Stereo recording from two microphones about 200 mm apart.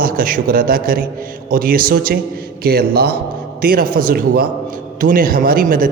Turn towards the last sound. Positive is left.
turn(degrees=-45)  # may be behind; listen again after turning